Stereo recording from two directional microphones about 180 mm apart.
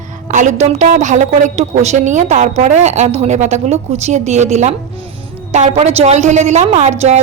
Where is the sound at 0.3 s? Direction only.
40° right (ahead or behind).